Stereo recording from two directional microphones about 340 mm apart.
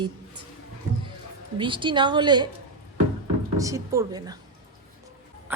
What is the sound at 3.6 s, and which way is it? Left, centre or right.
Speech, centre.